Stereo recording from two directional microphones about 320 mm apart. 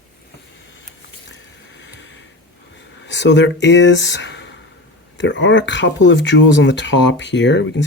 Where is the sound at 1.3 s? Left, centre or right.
Left.